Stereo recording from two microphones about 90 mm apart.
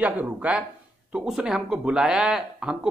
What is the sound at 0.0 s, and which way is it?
Speech, 15° right (ahead or behind).